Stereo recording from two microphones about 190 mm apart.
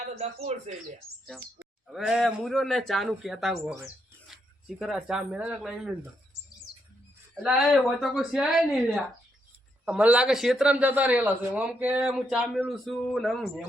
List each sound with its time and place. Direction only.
0.2 s speech: 35° right (ahead or behind)
1.9 s speech: centre (ahead or behind)
7.4 s speech: centre (ahead or behind)